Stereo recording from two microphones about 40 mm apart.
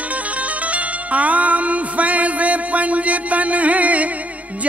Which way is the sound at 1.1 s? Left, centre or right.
Right.